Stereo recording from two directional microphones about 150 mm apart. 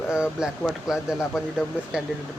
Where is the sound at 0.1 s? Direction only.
5° right (ahead or behind).